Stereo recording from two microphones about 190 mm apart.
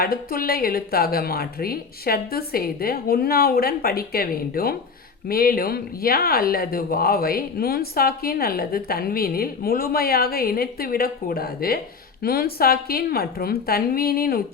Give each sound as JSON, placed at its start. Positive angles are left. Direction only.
{"t": 0.0, "sound": "speech", "side_deg": 50}